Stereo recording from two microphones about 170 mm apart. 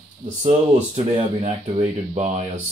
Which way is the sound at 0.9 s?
40° right (ahead or behind).